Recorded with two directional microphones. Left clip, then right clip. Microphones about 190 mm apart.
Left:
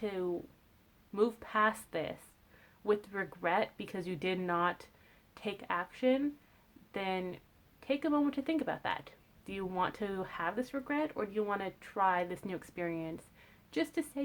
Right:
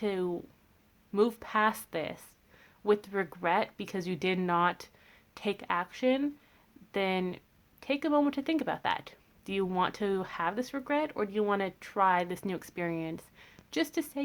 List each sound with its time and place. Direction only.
0.0 s speech: 40° right (ahead or behind)